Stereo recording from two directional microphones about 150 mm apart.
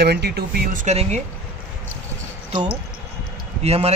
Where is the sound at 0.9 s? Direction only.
50° right (ahead or behind).